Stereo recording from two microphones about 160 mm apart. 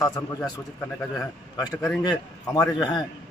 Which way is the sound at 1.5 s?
25° left (ahead or behind).